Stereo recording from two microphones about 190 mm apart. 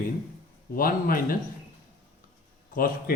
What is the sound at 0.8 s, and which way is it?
Speech, 50° left (ahead or behind).